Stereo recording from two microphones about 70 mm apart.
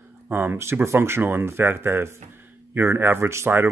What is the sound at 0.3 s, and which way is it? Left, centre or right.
Speech, right.